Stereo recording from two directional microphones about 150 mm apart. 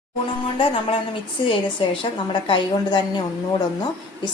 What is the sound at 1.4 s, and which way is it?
A woman's voice, 35° left (ahead or behind).